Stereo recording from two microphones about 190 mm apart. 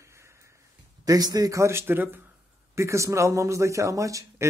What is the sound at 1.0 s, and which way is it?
A man's voice, 20° right (ahead or behind).